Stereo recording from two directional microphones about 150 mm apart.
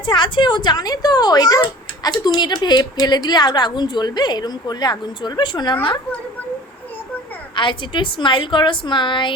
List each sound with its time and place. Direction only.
0.0 s a woman's voice: 30° left (ahead or behind)
7.5 s a woman's voice: 30° left (ahead or behind)